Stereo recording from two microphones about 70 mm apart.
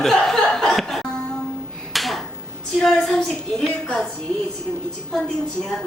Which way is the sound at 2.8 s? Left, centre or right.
Centre.